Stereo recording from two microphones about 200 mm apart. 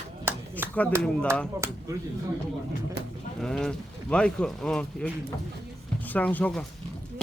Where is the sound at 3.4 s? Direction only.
5° left (ahead or behind).